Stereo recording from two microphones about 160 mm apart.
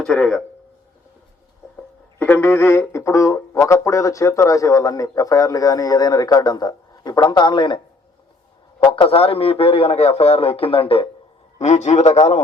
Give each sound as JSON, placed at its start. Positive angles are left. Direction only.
{"t": 0.0, "sound": "speech", "side_deg": 5}
{"t": 2.1, "sound": "speech", "side_deg": 10}
{"t": 8.8, "sound": "a man's voice", "side_deg": 30}
{"t": 11.6, "sound": "a man's voice", "side_deg": 45}